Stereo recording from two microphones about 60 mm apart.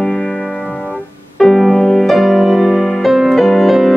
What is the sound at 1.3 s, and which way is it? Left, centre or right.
Music, centre.